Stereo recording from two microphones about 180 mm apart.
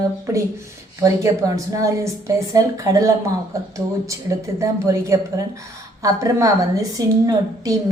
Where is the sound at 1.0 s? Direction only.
20° right (ahead or behind).